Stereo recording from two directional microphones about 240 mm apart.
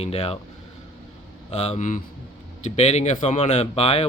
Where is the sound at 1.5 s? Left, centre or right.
Left.